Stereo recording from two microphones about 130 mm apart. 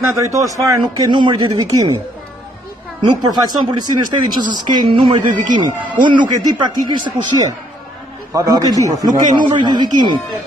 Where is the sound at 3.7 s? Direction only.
35° right (ahead or behind).